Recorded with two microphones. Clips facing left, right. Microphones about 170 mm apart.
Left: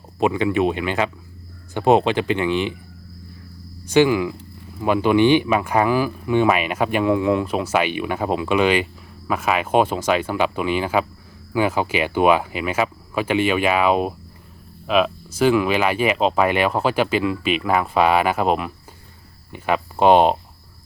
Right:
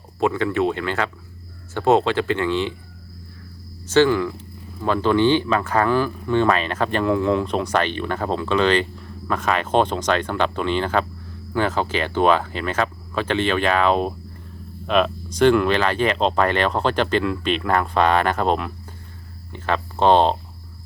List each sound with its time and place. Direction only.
0.2 s speech: 15° left (ahead or behind)
3.8 s speech: 15° left (ahead or behind)